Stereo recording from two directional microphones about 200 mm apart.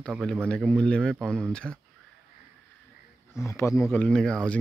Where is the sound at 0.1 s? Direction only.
5° right (ahead or behind).